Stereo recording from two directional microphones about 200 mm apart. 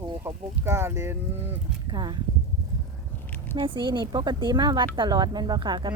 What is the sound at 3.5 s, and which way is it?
Speech, 25° right (ahead or behind).